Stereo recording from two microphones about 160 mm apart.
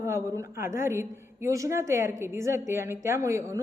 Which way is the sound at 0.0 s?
20° right (ahead or behind).